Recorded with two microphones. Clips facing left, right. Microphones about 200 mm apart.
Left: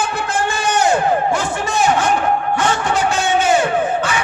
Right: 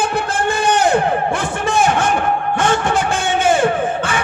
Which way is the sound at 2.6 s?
50° right (ahead or behind).